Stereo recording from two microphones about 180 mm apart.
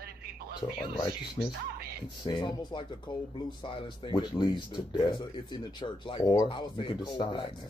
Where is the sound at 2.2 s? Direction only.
25° left (ahead or behind).